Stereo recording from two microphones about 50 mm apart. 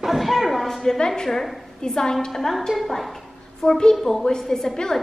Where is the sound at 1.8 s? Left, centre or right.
Centre.